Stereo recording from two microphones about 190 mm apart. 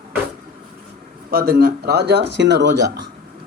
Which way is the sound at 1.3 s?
55° right (ahead or behind).